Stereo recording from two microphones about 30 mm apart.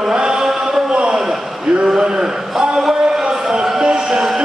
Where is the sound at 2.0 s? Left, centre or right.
Right.